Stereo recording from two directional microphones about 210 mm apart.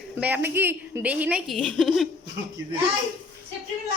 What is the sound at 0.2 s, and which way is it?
A woman's voice, 10° right (ahead or behind).